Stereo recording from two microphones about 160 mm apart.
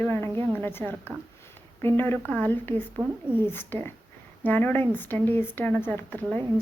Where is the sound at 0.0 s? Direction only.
15° left (ahead or behind).